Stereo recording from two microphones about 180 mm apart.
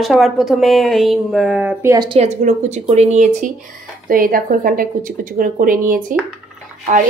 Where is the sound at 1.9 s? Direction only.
25° right (ahead or behind).